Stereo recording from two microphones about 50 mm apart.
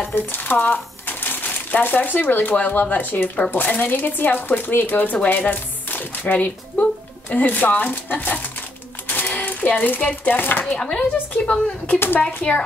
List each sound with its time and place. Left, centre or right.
0.1 s speech: left
9.0 s typewriter: left
9.9 s speech: left
10.7 s a woman's voice: centre